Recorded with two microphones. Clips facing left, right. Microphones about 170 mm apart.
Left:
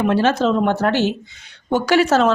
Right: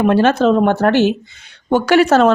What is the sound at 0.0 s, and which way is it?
Speech, 55° right (ahead or behind).